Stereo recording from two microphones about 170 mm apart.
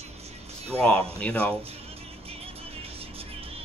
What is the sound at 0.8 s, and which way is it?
Speech, 5° left (ahead or behind).